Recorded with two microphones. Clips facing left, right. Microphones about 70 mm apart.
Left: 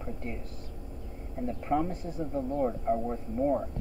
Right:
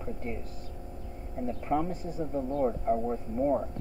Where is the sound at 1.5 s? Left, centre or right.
Centre.